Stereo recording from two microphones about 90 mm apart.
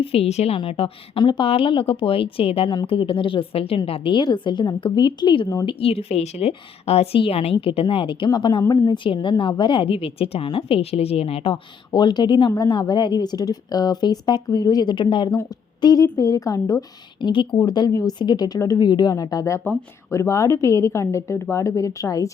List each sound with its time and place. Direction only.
0.0 s a woman's voice: 90° left
4.2 s a woman's voice: 55° left (ahead or behind)
5.6 s a woman's voice: 90° left; by 8.6 s 60° left (ahead or behind)
8.6 s a woman's voice: 40° left (ahead or behind)
9.4 s a woman's voice: 65° left (ahead or behind); by 11.6 s 85° left
11.9 s a woman's voice: 55° left (ahead or behind)
15.8 s a woman's voice: 50° left (ahead or behind)
16.1 s a woman's voice: 40° left (ahead or behind)
17.2 s a woman's voice: 65° left (ahead or behind)
17.6 s a woman's voice: 50° left (ahead or behind)